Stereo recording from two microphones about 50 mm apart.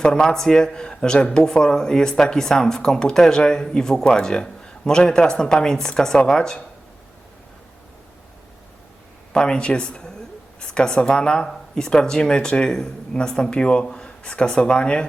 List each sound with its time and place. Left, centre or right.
0.0 s speech: centre
9.3 s a woman's voice: centre